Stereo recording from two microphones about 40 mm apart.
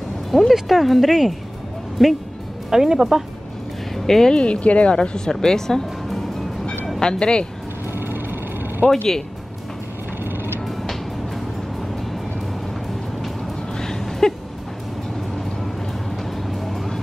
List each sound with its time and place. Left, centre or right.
0.3 s speech: centre
2.7 s speech: centre
3.9 s speech: centre
4.4 s speech: left
4.9 s speech: centre
7.0 s speech: centre
7.9 s vehicle: right
10.6 s music: centre
13.7 s a sound: centre
16.4 s music: centre